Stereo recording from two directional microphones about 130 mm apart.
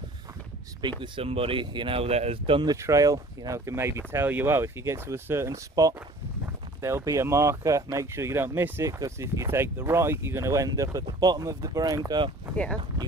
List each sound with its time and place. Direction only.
0.8 s speech: 35° right (ahead or behind)
2.7 s speech: 25° right (ahead or behind)
12.5 s speech: 10° left (ahead or behind)